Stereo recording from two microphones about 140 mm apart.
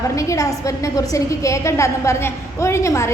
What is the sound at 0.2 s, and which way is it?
A woman's voice, 20° left (ahead or behind).